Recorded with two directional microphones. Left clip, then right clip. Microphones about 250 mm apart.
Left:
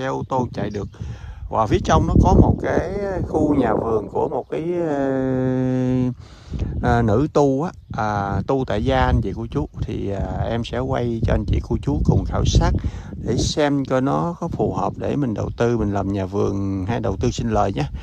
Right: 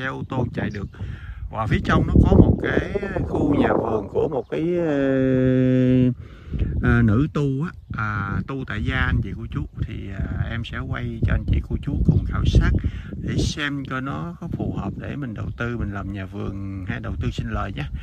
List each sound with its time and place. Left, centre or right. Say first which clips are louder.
0.0 s speech: left 5 dB; centre
14.2 s speech: left 9 dB; right
14.8 s speech: left 10 dB; centre